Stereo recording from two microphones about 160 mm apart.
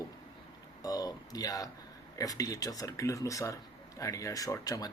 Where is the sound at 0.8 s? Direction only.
25° left (ahead or behind).